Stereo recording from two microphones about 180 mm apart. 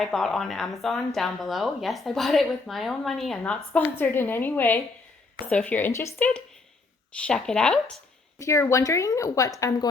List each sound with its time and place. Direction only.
0.0 s a woman's voice: centre (ahead or behind)
8.4 s a woman's voice: 15° left (ahead or behind)